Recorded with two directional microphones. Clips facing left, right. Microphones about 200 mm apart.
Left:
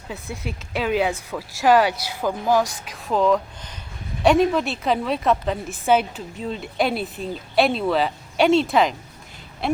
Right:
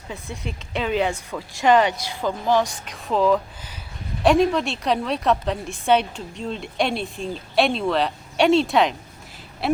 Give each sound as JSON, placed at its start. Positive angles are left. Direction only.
{"t": 0.1, "sound": "a woman's voice", "side_deg": 0}